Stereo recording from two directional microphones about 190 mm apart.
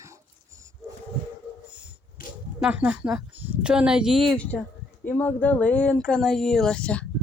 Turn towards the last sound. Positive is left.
turn(degrees=5)  # may be behind; listen again after turning